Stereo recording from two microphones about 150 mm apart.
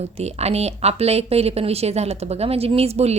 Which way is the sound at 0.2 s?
45° right (ahead or behind).